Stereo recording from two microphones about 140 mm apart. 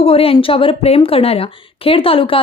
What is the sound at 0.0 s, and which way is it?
Speech, 40° left (ahead or behind).